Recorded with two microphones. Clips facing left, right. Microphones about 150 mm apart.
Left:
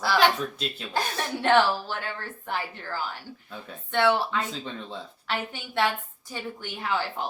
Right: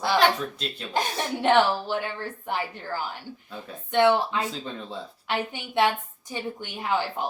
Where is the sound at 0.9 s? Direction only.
15° right (ahead or behind).